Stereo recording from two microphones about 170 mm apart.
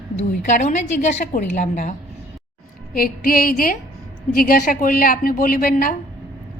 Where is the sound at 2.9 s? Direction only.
60° left (ahead or behind).